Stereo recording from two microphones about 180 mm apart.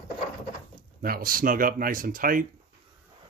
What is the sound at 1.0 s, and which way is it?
Speech, 55° right (ahead or behind).